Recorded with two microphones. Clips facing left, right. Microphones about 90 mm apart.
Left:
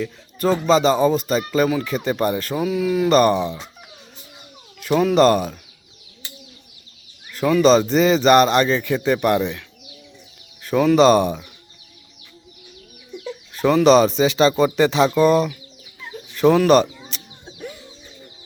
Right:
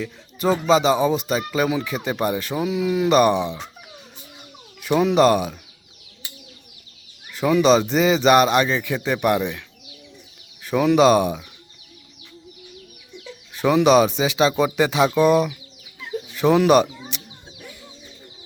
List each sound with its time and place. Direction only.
0.3 s speech: 15° right (ahead or behind)
4.8 s speech: 15° right (ahead or behind)
7.3 s speech: 15° right (ahead or behind)
13.5 s speech: 15° right (ahead or behind)